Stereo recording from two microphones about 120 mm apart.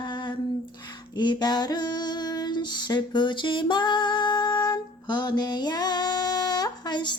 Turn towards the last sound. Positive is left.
turn(degrees=40)  # may be behind; listen again after turning